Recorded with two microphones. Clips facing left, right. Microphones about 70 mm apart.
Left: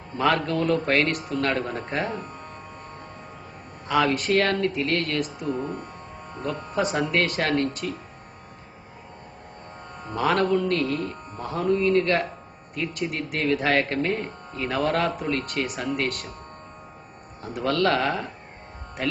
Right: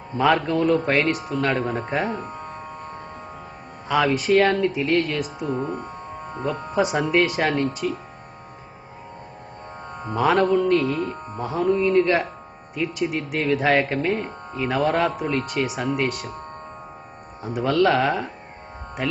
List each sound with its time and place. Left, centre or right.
0.4 s speech: centre
2.1 s speech: right
3.8 s speech: centre
5.5 s speech: centre
10.2 s speech: centre
17.4 s speech: centre